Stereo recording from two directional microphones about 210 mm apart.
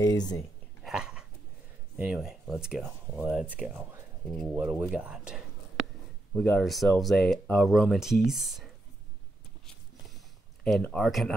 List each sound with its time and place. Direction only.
0.0 s speech: 20° left (ahead or behind)
0.8 s dog: 5° right (ahead or behind)
2.0 s speech: 5° right (ahead or behind)
4.9 s whispering: 5° right (ahead or behind)
6.3 s speech: 5° left (ahead or behind)
10.6 s speech: 5° left (ahead or behind)